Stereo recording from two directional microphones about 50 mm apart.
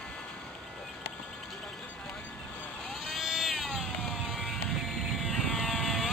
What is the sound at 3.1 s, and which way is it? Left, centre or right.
Cat, centre.